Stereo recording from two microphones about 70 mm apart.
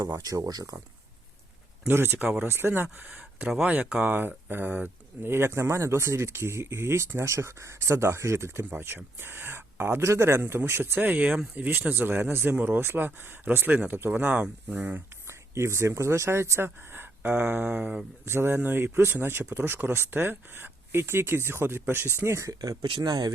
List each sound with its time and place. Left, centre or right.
0.2 s speech: right
1.9 s speech: right
2.1 s speech: right
2.5 s speech: right
14.3 s speech: centre
15.3 s speech: right
18.3 s speech: right
22.6 s speech: right